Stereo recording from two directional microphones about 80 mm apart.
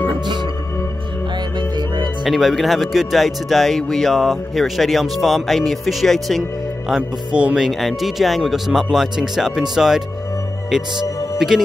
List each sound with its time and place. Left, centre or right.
1.6 s music: right
2.2 s speech: centre
7.0 s speech: centre
7.6 s speech: centre
11.3 s speech: centre